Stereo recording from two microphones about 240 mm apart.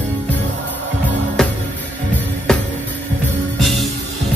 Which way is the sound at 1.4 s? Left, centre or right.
Centre.